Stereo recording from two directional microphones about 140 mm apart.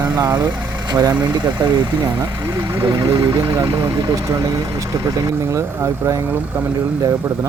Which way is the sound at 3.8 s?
25° right (ahead or behind).